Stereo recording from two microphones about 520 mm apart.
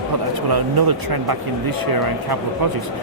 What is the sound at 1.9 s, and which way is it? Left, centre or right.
Speech, right.